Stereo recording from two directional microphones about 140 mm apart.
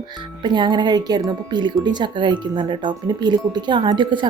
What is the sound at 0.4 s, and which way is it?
Speech, 35° right (ahead or behind).